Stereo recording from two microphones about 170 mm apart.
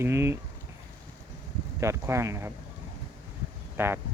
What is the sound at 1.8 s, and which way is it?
Speech, 15° right (ahead or behind).